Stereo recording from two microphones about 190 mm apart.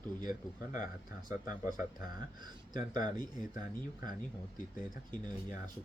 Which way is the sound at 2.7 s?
45° left (ahead or behind).